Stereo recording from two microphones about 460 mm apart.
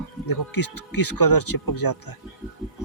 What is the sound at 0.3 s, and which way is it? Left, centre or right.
Speech, left.